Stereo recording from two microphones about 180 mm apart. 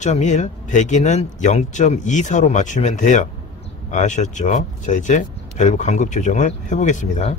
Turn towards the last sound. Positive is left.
turn(degrees=40)  # may be behind; listen again after turning